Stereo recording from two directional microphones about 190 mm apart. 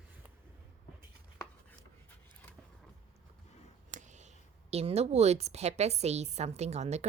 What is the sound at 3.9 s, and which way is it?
A woman's voice, 40° right (ahead or behind).